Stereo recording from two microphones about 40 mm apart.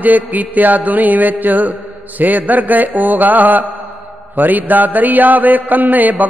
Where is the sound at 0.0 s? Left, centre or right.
Right.